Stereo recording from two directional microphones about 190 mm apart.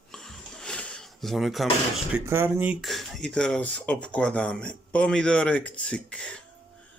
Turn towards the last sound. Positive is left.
turn(degrees=5)  # may be behind; listen again after turning